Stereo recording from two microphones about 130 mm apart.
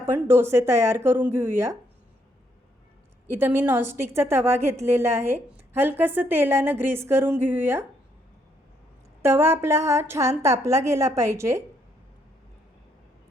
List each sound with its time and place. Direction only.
0.0 s a woman's voice: 20° right (ahead or behind)
3.2 s a woman's voice: 20° right (ahead or behind)
9.2 s a woman's voice: 20° right (ahead or behind)